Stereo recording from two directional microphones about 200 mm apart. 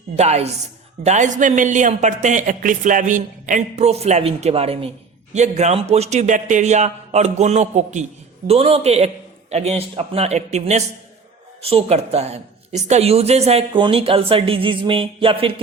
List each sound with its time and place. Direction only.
0.2 s speech: 30° right (ahead or behind)